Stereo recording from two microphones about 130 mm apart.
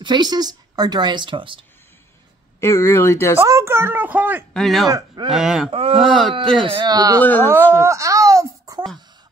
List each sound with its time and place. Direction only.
0.0 s speech: 35° right (ahead or behind)
2.6 s speech: 20° left (ahead or behind)
3.3 s a woman's voice: 20° right (ahead or behind)
4.6 s speech: centre (ahead or behind)
4.8 s speech: 30° right (ahead or behind)
5.3 s speech: 5° right (ahead or behind)
5.7 s speech: 45° right (ahead or behind)
5.9 s speech: centre (ahead or behind)
6.6 s speech: 40° right (ahead or behind)
7.2 s speech: 15° left (ahead or behind)
7.7 s a sound: 25° right (ahead or behind)